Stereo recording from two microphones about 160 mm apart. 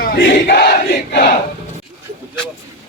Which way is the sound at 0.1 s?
90° left.